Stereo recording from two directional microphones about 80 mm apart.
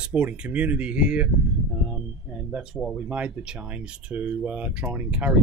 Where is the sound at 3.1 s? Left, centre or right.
Centre.